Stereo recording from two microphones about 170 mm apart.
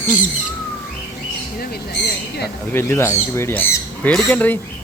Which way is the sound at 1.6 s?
70° left (ahead or behind).